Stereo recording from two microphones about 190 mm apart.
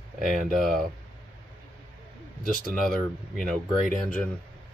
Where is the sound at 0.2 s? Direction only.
Centre (ahead or behind).